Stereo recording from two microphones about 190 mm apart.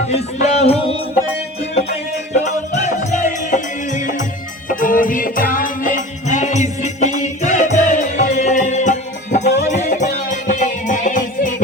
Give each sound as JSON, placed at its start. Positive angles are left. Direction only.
{"t": 0.1, "sound": "music", "side_deg": 35}
{"t": 2.4, "sound": "music", "side_deg": 40}